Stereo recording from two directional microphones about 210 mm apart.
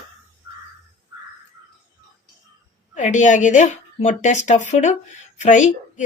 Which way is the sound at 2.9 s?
35° left (ahead or behind).